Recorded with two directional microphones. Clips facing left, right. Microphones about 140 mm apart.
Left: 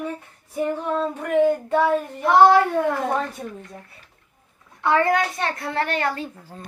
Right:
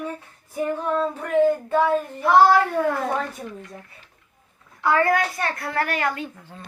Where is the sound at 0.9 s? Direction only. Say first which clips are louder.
Right 1 dB; 15° left (ahead or behind).